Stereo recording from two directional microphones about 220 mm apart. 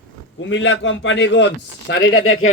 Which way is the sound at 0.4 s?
55° left (ahead or behind).